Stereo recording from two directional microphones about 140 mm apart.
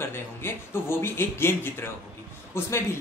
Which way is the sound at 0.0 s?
15° left (ahead or behind).